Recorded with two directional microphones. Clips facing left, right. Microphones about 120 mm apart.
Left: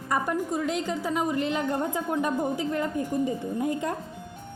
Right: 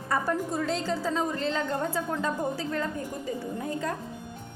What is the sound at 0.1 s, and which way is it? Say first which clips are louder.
A woman's voice: left 1 dB; 15° left (ahead or behind).